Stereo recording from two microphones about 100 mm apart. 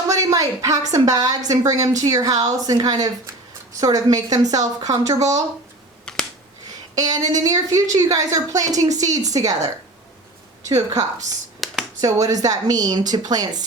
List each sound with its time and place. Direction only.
0.1 s a woman's voice: 35° right (ahead or behind)
6.1 s finger snapping: 10° left (ahead or behind)
6.7 s a woman's voice: 40° right (ahead or behind)
10.7 s a woman's voice: 35° right (ahead or behind)
11.6 s a sound: centre (ahead or behind)
11.9 s a woman's voice: 35° right (ahead or behind)